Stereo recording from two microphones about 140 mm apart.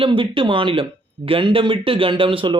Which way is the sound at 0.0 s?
40° right (ahead or behind).